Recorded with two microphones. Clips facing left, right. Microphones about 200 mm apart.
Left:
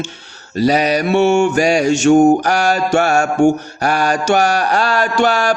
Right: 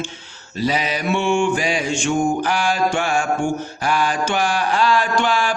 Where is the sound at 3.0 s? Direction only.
70° left (ahead or behind).